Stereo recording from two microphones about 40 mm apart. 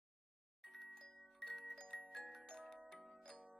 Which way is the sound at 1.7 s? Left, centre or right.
Left.